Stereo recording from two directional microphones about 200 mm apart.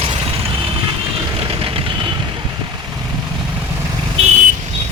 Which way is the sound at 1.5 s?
25° right (ahead or behind).